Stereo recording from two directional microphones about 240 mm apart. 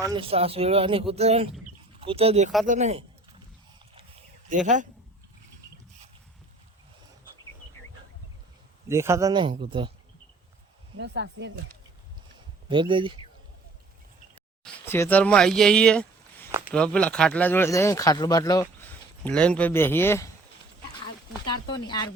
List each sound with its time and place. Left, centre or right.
0.0 s speech: centre
3.9 s a sound: right
8.9 s speech: centre
10.9 s speech: right
12.6 s speech: centre
14.6 s speech: centre
16.5 s a sound: centre
16.7 s speech: centre
19.2 s speech: centre
21.7 s speech: centre